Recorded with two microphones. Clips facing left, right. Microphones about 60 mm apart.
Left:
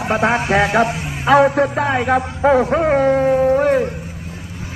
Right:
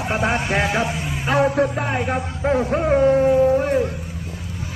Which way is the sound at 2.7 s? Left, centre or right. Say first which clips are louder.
Left 2 dB; left.